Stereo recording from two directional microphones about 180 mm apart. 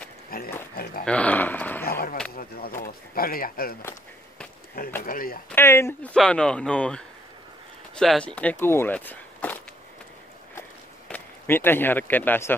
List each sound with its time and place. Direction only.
0.3 s pig: 55° left (ahead or behind)
1.0 s dog: 5° left (ahead or behind)
1.9 s a sound: 55° left (ahead or behind)
5.0 s speech: 50° left (ahead or behind)
5.5 s speech: 15° left (ahead or behind)
8.6 s a sound: 10° left (ahead or behind)
11.1 s speech: 10° left (ahead or behind)